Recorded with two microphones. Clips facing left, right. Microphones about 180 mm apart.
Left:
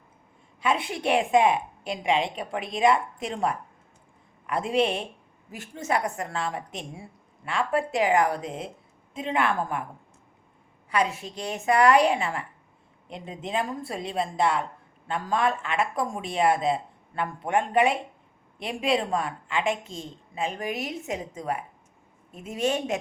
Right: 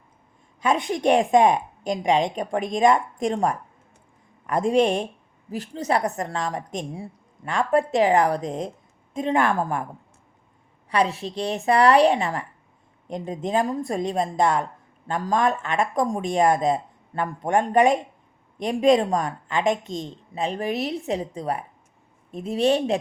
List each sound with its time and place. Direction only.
0.6 s a woman's voice: 40° right (ahead or behind)
10.8 s a woman's voice: 35° right (ahead or behind)